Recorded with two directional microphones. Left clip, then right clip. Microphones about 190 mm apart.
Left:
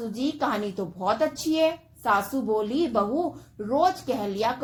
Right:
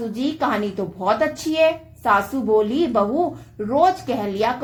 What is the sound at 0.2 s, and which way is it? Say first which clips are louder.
A woman's voice: right 5 dB; 35° left (ahead or behind).